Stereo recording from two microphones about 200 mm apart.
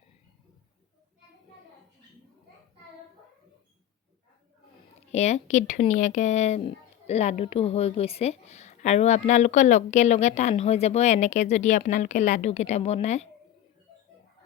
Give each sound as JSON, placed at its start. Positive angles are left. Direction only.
{"t": 5.1, "sound": "speech", "side_deg": 35}